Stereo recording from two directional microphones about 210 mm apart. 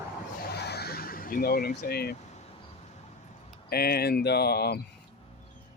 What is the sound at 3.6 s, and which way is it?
Speech, 45° left (ahead or behind).